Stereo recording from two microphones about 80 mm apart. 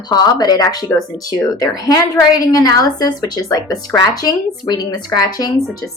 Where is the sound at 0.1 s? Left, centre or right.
Left.